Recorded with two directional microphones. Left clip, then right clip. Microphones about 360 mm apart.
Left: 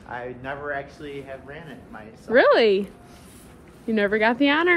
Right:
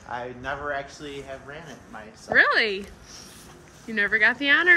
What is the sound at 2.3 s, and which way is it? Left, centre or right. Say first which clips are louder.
Speech: left 3 dB; centre.